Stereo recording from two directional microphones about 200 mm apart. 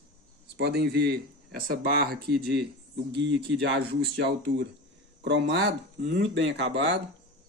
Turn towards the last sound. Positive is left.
turn(degrees=-60)  # may be behind; listen again after turning